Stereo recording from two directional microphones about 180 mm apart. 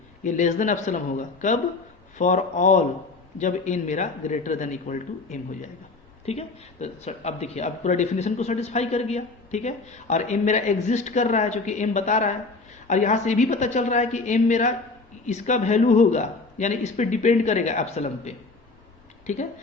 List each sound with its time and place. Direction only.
0.2 s a man's voice: 45° left (ahead or behind)